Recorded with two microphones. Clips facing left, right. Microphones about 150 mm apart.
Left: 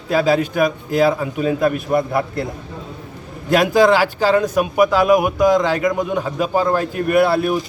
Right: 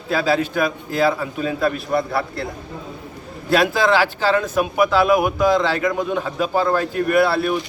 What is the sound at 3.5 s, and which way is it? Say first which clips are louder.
A man's voice: left 3 dB; 15° left (ahead or behind).